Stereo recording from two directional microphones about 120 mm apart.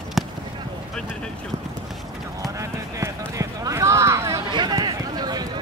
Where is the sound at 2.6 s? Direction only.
25° right (ahead or behind).